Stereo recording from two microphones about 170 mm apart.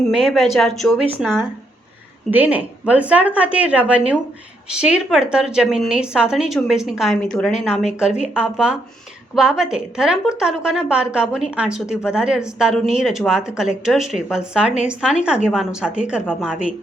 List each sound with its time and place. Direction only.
0.1 s a woman's voice: 5° right (ahead or behind)
2.3 s a woman's voice: 10° right (ahead or behind)